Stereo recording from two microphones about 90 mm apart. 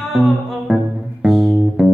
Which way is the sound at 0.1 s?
5° right (ahead or behind).